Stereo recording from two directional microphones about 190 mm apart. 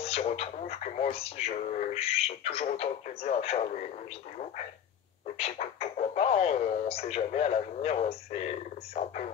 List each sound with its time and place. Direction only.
0.0 s speech: 30° left (ahead or behind)
5.4 s speech: 35° left (ahead or behind)